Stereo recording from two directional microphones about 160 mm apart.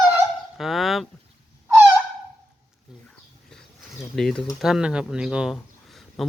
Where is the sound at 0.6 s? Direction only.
Centre (ahead or behind).